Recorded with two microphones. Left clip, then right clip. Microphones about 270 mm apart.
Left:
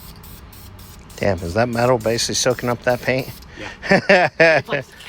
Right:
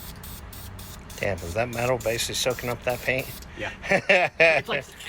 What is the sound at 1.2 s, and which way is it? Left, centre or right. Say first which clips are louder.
Speech: left 8 dB; left.